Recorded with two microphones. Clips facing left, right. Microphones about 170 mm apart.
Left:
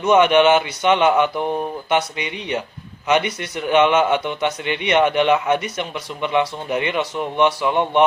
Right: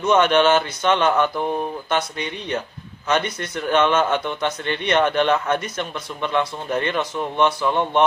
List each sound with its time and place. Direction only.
0.1 s a man's voice: 15° left (ahead or behind)